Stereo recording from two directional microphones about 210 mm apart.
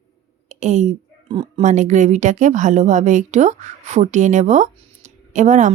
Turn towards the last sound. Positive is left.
turn(degrees=-35)  # may be behind; listen again after turning